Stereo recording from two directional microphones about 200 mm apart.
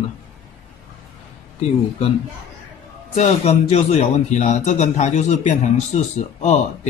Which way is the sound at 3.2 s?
30° left (ahead or behind).